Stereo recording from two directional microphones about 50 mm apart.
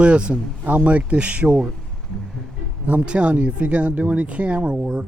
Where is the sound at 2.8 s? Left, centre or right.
Right.